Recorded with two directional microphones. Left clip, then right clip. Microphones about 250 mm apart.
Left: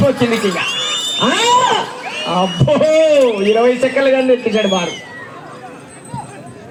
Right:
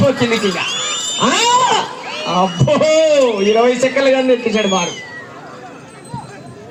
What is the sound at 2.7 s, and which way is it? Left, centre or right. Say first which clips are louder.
Speech: left 1 dB; right.